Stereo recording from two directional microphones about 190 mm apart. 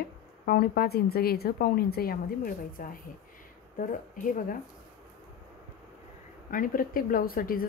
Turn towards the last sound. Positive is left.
turn(degrees=50)  # may be behind; listen again after turning